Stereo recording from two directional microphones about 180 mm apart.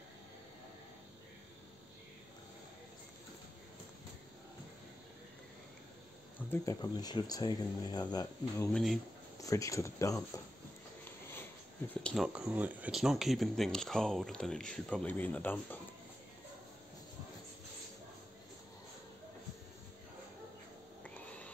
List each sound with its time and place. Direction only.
6.5 s speech: 20° left (ahead or behind)
8.7 s speech: centre (ahead or behind)
9.4 s speech: 20° left (ahead or behind)
11.1 s a sound: 10° left (ahead or behind)
11.9 s speech: 5° left (ahead or behind)
12.3 s speech: 5° right (ahead or behind); by 15.8 s 10° left (ahead or behind)
21.0 s a sound: 5° left (ahead or behind)